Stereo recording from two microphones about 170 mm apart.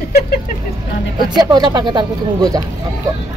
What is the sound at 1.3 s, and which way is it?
Speech, 25° right (ahead or behind).